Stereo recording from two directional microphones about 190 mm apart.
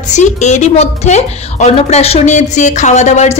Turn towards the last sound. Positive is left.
turn(degrees=35)  # may be behind; listen again after turning